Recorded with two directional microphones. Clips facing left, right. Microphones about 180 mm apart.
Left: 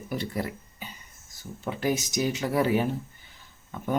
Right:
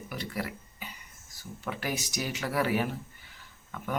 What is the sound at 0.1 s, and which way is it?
Speech, 25° left (ahead or behind).